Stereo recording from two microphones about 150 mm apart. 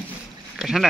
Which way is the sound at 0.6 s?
5° right (ahead or behind).